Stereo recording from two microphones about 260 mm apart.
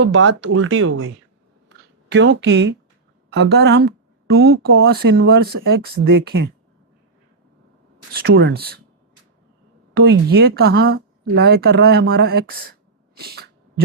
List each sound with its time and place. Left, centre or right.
0.0 s speech: right
4.7 s speech: right
4.9 s speech: right
8.1 s speech: right
9.9 s speech: right
13.1 s sneeze: right